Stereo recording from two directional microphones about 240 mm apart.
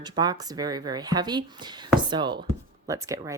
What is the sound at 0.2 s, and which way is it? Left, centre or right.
Speech, centre.